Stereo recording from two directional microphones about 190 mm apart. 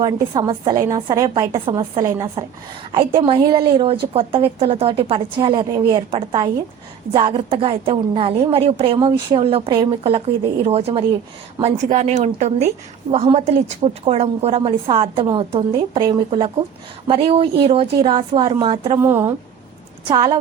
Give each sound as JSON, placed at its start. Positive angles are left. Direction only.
{"t": 0.0, "sound": "a woman's voice", "side_deg": -20}
{"t": 19.0, "sound": "speech", "side_deg": -10}
{"t": 20.1, "sound": "a woman's voice", "side_deg": -25}